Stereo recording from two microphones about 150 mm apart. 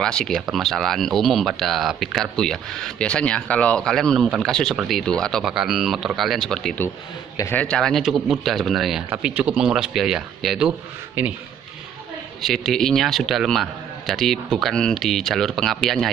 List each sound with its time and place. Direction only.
0.0 s a man's voice: 5° left (ahead or behind)
7.3 s a man's voice: 20° left (ahead or behind)
7.6 s a man's voice: 5° left (ahead or behind)
12.4 s a man's voice: centre (ahead or behind)